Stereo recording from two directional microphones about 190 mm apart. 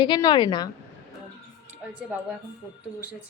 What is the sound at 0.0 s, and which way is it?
Speech, 20° left (ahead or behind).